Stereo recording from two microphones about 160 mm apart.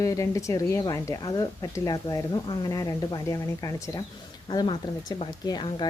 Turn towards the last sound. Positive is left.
turn(degrees=25)  # may be behind; listen again after turning